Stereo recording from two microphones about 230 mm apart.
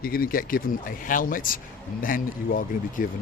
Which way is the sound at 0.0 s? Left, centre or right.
Left.